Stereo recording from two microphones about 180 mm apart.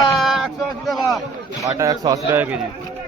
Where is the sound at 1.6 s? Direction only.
20° right (ahead or behind).